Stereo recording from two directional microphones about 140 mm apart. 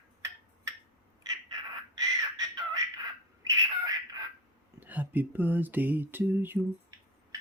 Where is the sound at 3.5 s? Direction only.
25° right (ahead or behind).